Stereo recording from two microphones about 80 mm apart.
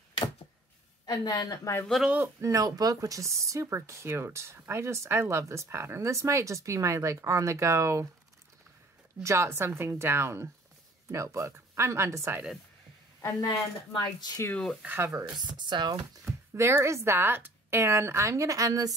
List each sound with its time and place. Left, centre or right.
1.0 s speech: left
2.0 s speech: right
2.4 s speech: right
9.2 s speech: right
13.9 s speech: left
14.5 s speech: centre
14.9 s speech: right
15.5 s speech: right
16.3 s speech: right